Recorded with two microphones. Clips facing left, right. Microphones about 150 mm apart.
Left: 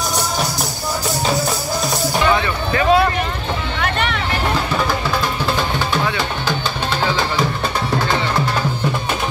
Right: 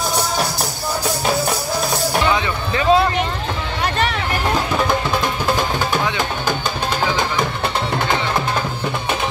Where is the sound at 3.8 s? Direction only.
35° right (ahead or behind).